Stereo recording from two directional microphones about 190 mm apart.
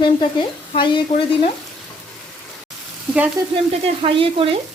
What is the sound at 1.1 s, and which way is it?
Frying, 30° left (ahead or behind).